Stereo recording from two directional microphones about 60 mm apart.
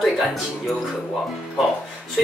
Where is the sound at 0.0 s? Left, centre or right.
Centre.